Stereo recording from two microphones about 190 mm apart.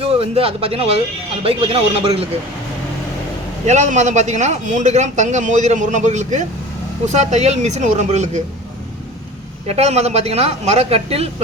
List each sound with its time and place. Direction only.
0.0 s a man's voice: 30° right (ahead or behind)
3.7 s a man's voice: 40° right (ahead or behind)
9.6 s a man's voice: 35° right (ahead or behind)